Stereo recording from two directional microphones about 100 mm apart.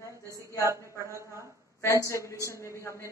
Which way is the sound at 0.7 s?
30° right (ahead or behind).